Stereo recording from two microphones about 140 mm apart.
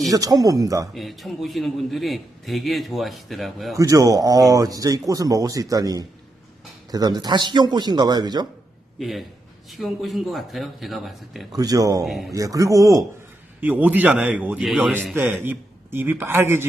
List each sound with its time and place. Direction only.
0.1 s speech: 25° right (ahead or behind)
0.9 s a man's voice: centre (ahead or behind)
3.7 s speech: 25° right (ahead or behind)
9.7 s a man's voice: centre (ahead or behind)
11.5 s speech: 25° right (ahead or behind)
13.6 s a man's voice: 10° right (ahead or behind)